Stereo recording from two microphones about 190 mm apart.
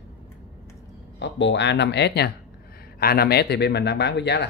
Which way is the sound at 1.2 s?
70° left (ahead or behind).